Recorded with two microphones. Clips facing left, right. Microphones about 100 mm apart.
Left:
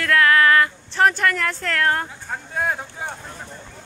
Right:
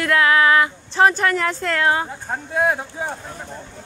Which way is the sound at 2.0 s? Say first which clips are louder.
Right 4 dB; 30° right (ahead or behind).